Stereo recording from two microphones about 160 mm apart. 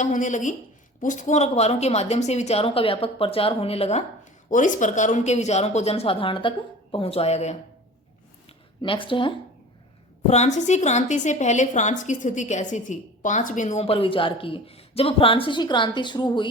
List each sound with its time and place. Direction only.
0.0 s a woman's voice: 50° left (ahead or behind)
4.4 s a woman's voice: 50° left (ahead or behind)
8.4 s a sound: 30° left (ahead or behind)
10.2 s a woman's voice: 45° left (ahead or behind); by 16.5 s 30° left (ahead or behind)